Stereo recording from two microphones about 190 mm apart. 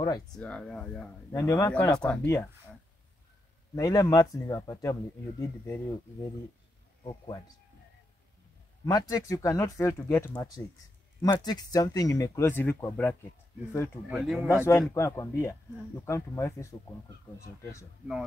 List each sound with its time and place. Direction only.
0.0 s speech: 20° left (ahead or behind)
0.4 s speech: 5° left (ahead or behind)
1.3 s speech: 15° left (ahead or behind)
3.7 s speech: 15° left (ahead or behind)
7.0 s speech: 20° left (ahead or behind)
8.8 s speech: 20° left (ahead or behind)
14.1 s speech: 5° right (ahead or behind)
14.5 s speech: 15° left (ahead or behind)